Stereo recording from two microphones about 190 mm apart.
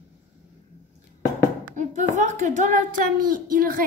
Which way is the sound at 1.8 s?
40° right (ahead or behind).